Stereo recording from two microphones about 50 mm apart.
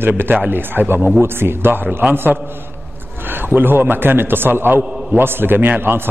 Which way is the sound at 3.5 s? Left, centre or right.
Right.